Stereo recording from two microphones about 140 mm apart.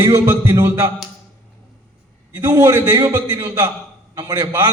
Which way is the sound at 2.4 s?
25° right (ahead or behind).